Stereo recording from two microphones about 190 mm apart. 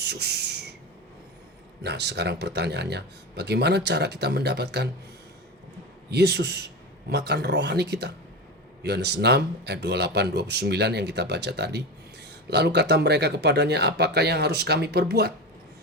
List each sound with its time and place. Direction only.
0.0 s a sound: 60° right (ahead or behind)
1.8 s speech: 60° right (ahead or behind)
6.1 s speech: 60° right (ahead or behind)